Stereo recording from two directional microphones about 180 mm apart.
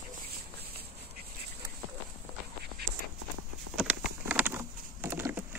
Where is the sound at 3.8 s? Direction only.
5° right (ahead or behind).